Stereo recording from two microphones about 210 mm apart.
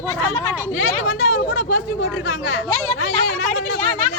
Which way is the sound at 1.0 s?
70° left (ahead or behind).